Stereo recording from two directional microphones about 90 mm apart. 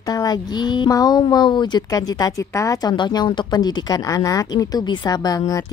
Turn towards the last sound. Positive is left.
turn(degrees=45)  # may be behind; listen again after turning